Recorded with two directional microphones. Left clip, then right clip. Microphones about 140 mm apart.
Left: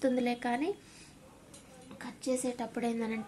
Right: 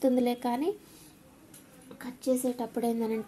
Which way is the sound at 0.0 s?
40° right (ahead or behind).